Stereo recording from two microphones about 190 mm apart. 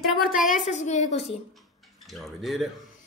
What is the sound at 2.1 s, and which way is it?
Speech, centre (ahead or behind).